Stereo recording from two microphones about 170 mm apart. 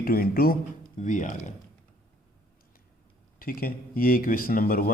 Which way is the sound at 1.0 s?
45° left (ahead or behind).